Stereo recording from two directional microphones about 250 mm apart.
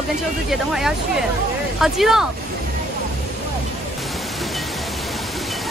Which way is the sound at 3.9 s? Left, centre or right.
Centre.